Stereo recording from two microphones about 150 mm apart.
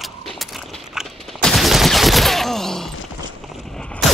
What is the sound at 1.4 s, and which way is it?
Fusillade, centre (ahead or behind).